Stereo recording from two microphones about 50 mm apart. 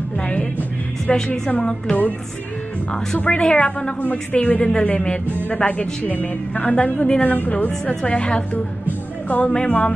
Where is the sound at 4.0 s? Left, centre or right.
Left.